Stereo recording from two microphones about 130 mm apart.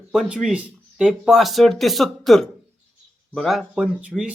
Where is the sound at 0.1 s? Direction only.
5° right (ahead or behind).